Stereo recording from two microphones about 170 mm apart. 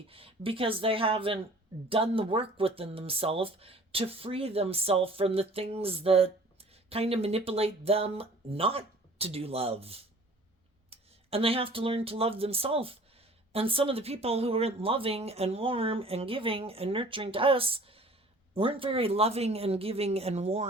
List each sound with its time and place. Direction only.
0.1 s speech: 35° right (ahead or behind)